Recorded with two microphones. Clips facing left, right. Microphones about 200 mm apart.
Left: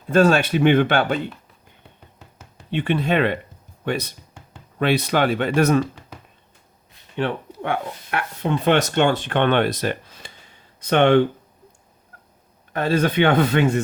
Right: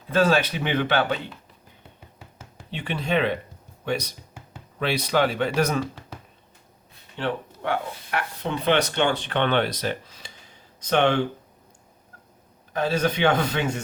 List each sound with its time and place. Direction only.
0.3 s speech: 50° left (ahead or behind)
2.6 s speech: 55° left (ahead or behind)
4.8 s speech: 60° left (ahead or behind)
7.2 s speech: 55° left (ahead or behind)
12.7 s speech: 55° left (ahead or behind)